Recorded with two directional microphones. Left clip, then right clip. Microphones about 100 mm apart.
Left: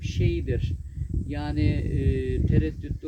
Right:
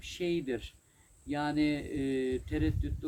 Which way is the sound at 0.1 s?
40° right (ahead or behind).